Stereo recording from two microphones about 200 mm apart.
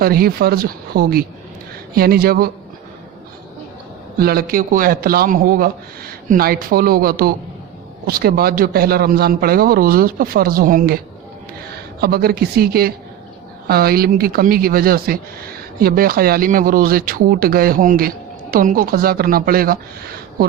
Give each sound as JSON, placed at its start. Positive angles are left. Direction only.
{"t": 0.0, "sound": "speech", "side_deg": -50}
{"t": 4.2, "sound": "speech", "side_deg": -50}